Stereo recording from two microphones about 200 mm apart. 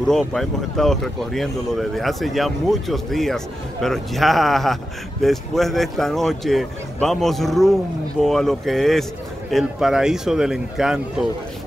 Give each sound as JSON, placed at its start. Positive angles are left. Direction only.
{"t": 0.0, "sound": "speech", "side_deg": 0}